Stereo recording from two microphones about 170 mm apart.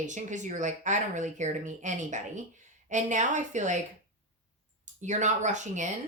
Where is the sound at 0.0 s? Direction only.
45° right (ahead or behind).